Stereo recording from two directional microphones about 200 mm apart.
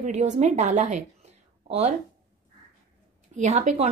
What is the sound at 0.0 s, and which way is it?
A woman's voice, 35° right (ahead or behind).